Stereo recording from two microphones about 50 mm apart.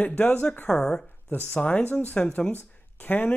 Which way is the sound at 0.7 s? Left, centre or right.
Centre.